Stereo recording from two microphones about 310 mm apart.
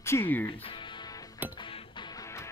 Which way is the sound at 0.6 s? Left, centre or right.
Centre.